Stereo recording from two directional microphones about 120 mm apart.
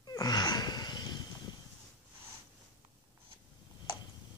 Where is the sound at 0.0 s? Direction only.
35° left (ahead or behind).